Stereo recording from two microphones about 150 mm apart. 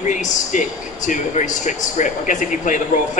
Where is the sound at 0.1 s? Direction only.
55° left (ahead or behind).